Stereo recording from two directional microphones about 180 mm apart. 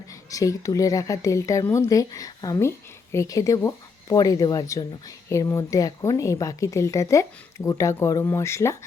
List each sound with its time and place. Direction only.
0.3 s a woman's voice: 20° left (ahead or behind)